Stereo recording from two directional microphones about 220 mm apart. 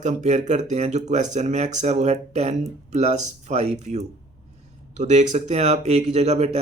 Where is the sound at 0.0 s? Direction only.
35° right (ahead or behind).